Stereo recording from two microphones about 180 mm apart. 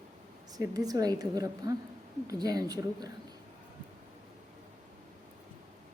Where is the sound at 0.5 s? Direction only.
20° right (ahead or behind).